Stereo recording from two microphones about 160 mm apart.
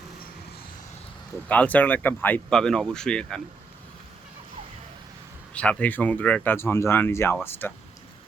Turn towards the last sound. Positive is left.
turn(degrees=15)  # may be behind; listen again after turning